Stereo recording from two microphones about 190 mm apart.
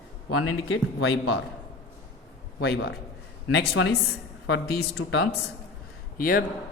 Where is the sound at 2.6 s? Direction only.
55° left (ahead or behind).